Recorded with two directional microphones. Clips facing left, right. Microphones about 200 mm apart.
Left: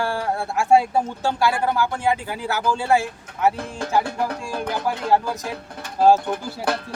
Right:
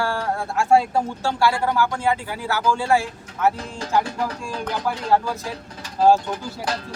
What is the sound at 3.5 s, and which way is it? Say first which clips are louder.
Speech: even; 55° left (ahead or behind).